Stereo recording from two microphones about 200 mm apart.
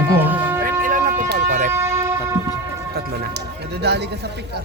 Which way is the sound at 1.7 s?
15° right (ahead or behind).